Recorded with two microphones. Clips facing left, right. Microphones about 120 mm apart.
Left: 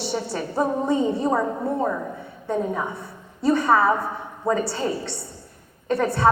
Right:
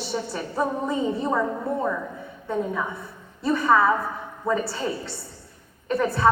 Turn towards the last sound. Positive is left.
turn(degrees=30)  # may be behind; listen again after turning